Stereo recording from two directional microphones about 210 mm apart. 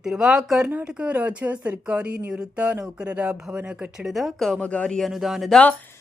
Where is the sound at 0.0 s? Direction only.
Centre (ahead or behind).